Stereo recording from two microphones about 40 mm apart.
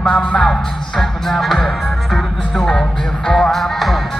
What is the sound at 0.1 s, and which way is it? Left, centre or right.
Speech, left.